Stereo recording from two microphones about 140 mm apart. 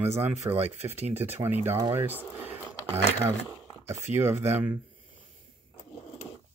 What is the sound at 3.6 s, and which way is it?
Speech, 20° right (ahead or behind).